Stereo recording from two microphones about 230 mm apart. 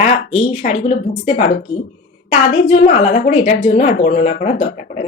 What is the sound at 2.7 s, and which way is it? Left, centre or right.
A woman's voice, left.